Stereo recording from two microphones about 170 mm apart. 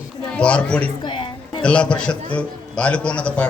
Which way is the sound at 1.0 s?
30° left (ahead or behind).